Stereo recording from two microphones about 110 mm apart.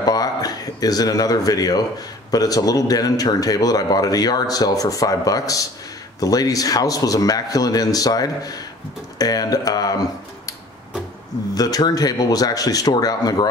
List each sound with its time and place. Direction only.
0.0 s a man's voice: 35° left (ahead or behind)
11.5 s a man's voice: 35° left (ahead or behind)